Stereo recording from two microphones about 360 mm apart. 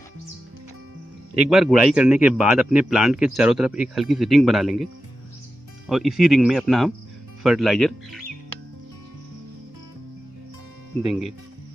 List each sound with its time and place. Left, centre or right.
1.5 s speech: centre
5.9 s speech: centre
11.1 s speech: centre